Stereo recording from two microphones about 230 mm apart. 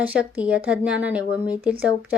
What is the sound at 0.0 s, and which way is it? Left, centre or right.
Speech, centre.